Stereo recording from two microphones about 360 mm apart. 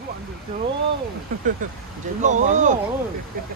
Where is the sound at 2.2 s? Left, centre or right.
Centre.